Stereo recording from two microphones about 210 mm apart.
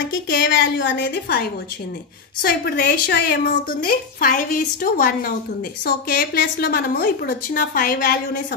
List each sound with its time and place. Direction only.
0.3 s a woman's voice: 55° left (ahead or behind)